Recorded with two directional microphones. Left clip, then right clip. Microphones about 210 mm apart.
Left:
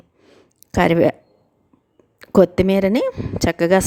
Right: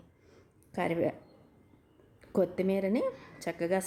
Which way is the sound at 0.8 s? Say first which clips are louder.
Left 16 dB; 45° left (ahead or behind).